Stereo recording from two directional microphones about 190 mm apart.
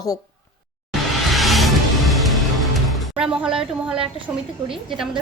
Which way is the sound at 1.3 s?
Centre (ahead or behind).